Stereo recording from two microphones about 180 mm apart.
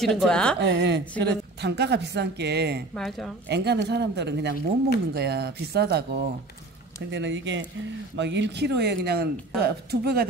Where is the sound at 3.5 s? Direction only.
70° right (ahead or behind).